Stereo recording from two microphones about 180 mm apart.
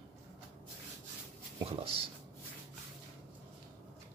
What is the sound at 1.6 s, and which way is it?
Speech, 30° right (ahead or behind).